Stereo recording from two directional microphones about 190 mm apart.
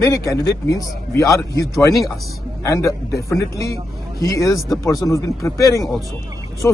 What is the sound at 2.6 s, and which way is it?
Speech, 15° left (ahead or behind).